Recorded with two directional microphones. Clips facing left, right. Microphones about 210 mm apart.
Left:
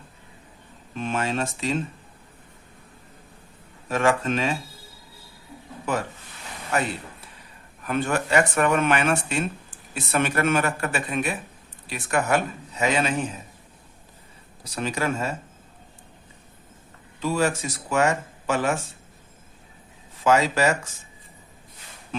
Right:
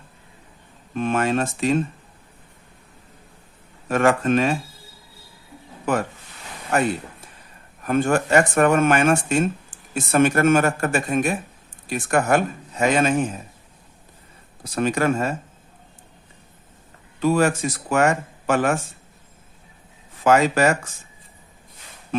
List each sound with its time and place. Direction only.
0.9 s speech: 55° right (ahead or behind)
3.8 s speech: 55° right (ahead or behind)
7.8 s speech: 45° right (ahead or behind)
14.6 s speech: 55° right (ahead or behind)
17.2 s speech: 55° right (ahead or behind)
20.2 s speech: 55° right (ahead or behind)